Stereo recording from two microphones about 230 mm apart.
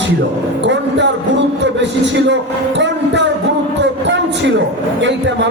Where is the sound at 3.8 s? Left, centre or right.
Right.